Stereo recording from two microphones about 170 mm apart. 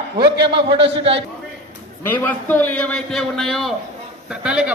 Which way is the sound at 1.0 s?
35° right (ahead or behind).